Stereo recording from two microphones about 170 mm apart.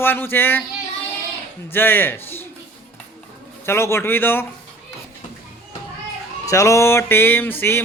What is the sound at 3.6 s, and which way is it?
Music, 15° left (ahead or behind).